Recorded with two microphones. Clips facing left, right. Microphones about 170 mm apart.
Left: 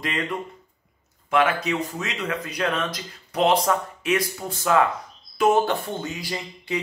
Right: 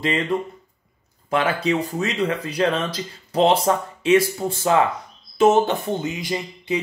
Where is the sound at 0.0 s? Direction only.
30° right (ahead or behind).